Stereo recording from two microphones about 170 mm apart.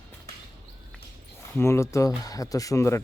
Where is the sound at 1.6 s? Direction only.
15° left (ahead or behind).